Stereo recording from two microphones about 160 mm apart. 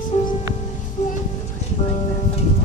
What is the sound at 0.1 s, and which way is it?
Music, 45° left (ahead or behind).